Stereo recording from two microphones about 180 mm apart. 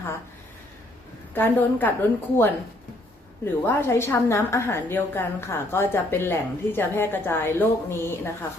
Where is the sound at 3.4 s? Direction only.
15° left (ahead or behind).